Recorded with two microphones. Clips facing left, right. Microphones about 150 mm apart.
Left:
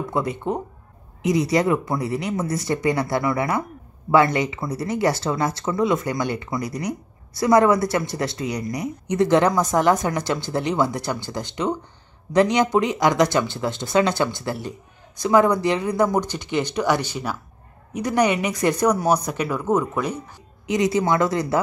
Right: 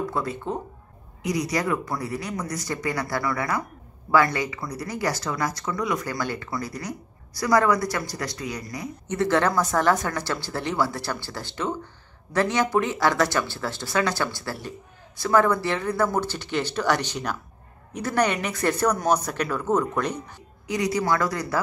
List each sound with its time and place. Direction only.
0.1 s speech: 20° left (ahead or behind)
20.6 s speech: 20° left (ahead or behind)